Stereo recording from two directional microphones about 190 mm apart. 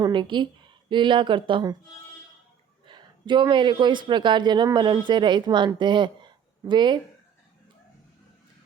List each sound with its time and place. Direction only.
0.0 s speech: 25° right (ahead or behind)
2.8 s speech: 25° right (ahead or behind)